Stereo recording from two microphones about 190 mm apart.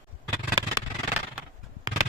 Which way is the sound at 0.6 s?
10° right (ahead or behind).